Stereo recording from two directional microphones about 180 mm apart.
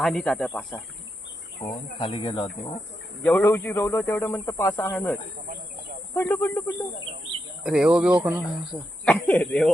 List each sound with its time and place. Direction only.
0.0 s speech: 5° left (ahead or behind)
1.6 s speech: 25° left (ahead or behind)
3.2 s a man's voice: 10° left (ahead or behind)
6.1 s a man's voice: 15° left (ahead or behind)
7.6 s speech: 5° right (ahead or behind)
9.0 s a man's voice: 5° left (ahead or behind)